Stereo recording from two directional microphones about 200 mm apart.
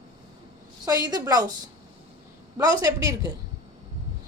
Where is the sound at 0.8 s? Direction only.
20° right (ahead or behind).